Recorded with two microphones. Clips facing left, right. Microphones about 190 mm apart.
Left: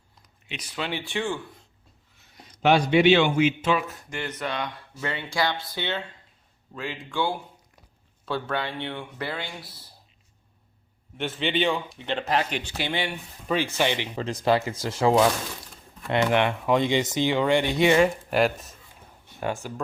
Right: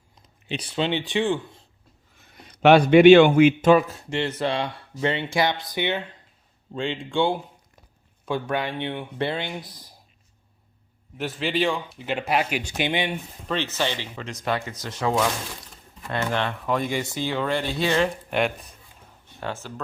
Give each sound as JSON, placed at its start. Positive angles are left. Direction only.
{"t": 0.4, "sound": "speech", "side_deg": -30}
{"t": 2.1, "sound": "a man's voice", "side_deg": -55}
{"t": 3.8, "sound": "speech", "side_deg": -25}
{"t": 6.7, "sound": "speech", "side_deg": -25}
{"t": 11.2, "sound": "speech", "side_deg": 0}
{"t": 13.5, "sound": "speech", "side_deg": 10}
{"t": 14.2, "sound": "speech", "side_deg": 30}
{"t": 19.4, "sound": "speech", "side_deg": 15}